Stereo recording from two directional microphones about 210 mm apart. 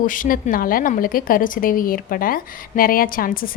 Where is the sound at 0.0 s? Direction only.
40° left (ahead or behind).